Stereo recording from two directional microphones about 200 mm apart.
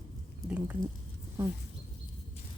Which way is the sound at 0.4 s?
5° right (ahead or behind).